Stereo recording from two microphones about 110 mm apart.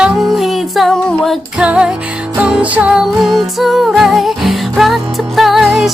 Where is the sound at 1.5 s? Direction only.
10° right (ahead or behind).